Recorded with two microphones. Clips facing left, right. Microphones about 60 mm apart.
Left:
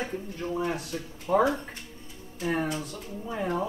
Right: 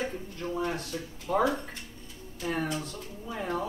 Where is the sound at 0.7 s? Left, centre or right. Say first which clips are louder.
Left 1 dB; centre.